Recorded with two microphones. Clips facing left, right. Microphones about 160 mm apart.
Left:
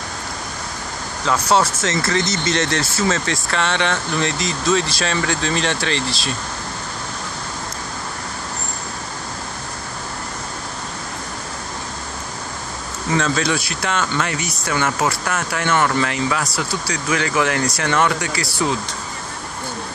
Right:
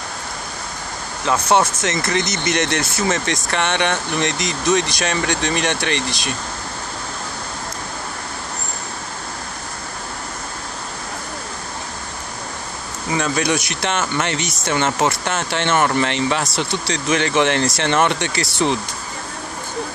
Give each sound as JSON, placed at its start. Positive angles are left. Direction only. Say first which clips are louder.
{"t": 1.2, "sound": "speech", "louder": "right 1 dB", "side_deg": -20}
{"t": 13.1, "sound": "speech", "louder": "even", "side_deg": -15}